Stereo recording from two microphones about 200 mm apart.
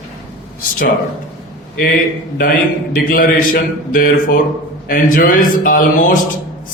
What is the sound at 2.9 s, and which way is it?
A man's voice, 45° left (ahead or behind).